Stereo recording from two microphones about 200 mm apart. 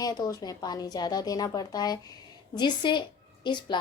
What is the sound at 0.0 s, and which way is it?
A woman's voice, 20° left (ahead or behind).